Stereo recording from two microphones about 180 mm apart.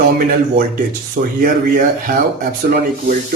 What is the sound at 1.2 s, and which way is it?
Speech, 50° right (ahead or behind).